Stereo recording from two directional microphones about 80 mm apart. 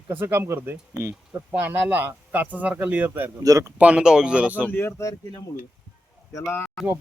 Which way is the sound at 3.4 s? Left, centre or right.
Right.